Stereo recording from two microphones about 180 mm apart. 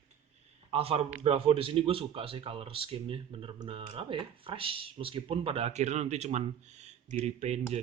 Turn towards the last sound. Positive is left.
turn(degrees=-35)  # may be behind; listen again after turning